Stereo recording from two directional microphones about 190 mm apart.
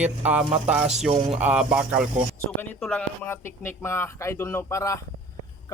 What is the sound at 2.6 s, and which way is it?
Speech, 5° left (ahead or behind).